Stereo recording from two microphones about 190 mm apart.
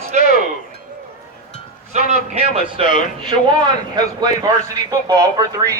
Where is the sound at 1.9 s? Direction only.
40° right (ahead or behind).